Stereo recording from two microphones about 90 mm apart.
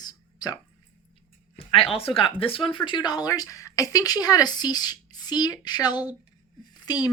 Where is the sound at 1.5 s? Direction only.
90° left.